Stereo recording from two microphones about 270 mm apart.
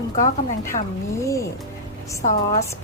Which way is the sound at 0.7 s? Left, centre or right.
Left.